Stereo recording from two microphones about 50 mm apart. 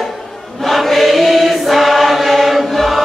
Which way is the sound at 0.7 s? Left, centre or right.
Centre.